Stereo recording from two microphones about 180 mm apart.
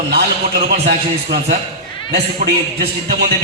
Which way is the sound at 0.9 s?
65° right (ahead or behind).